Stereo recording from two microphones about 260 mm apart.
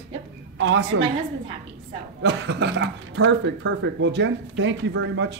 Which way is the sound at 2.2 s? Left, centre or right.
Right.